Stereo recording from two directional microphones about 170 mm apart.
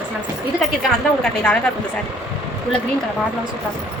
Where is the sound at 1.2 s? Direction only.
5° left (ahead or behind).